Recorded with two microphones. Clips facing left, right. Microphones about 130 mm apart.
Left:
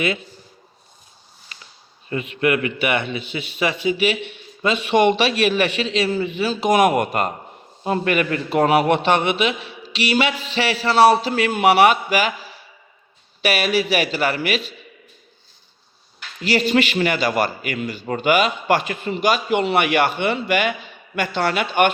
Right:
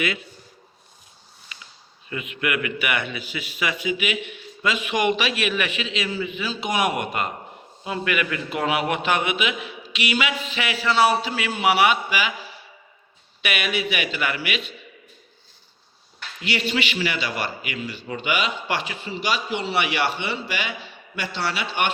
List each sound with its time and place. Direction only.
1.5 s a sound: 40° left (ahead or behind)
2.0 s a man's voice: 35° left (ahead or behind)
13.4 s a man's voice: 35° left (ahead or behind)
16.4 s a man's voice: 40° left (ahead or behind)